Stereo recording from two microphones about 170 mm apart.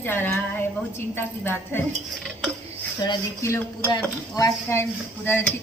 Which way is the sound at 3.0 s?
25° left (ahead or behind).